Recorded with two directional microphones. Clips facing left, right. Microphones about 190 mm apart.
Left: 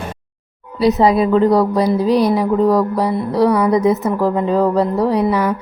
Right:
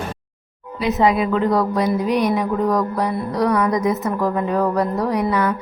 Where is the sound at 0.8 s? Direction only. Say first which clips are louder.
Left 5 dB; 35° left (ahead or behind).